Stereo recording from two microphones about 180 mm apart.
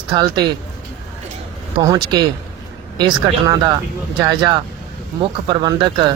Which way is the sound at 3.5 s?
20° right (ahead or behind).